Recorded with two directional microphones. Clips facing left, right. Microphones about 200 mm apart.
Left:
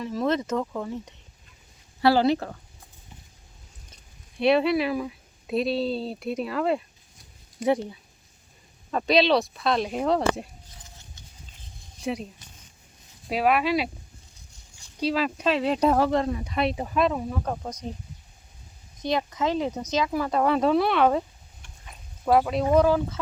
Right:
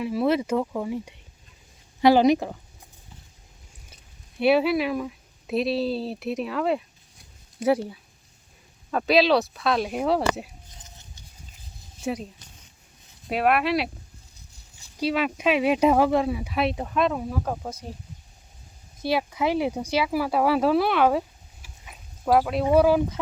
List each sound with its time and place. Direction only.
0.0 s speech: 10° right (ahead or behind)
4.4 s speech: 5° right (ahead or behind)
10.8 s a sound: 20° right (ahead or behind)
11.9 s speech: centre (ahead or behind)
14.9 s speech: 5° right (ahead or behind)
19.0 s speech: 10° right (ahead or behind)